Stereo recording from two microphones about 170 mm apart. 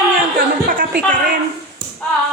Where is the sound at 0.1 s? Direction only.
55° right (ahead or behind).